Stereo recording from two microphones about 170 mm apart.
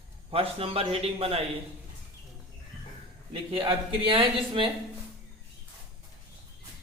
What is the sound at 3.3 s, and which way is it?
A man's voice, 30° right (ahead or behind).